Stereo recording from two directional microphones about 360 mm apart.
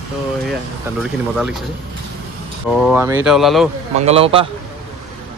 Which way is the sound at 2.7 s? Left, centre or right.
Centre.